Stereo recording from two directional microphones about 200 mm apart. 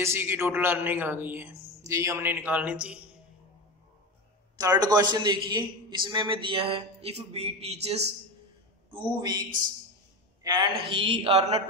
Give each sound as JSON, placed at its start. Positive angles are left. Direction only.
{"t": 0.0, "sound": "a man's voice", "side_deg": -10}
{"t": 4.6, "sound": "a man's voice", "side_deg": -20}
{"t": 9.0, "sound": "a man's voice", "side_deg": -20}
{"t": 10.4, "sound": "a woman's voice", "side_deg": -20}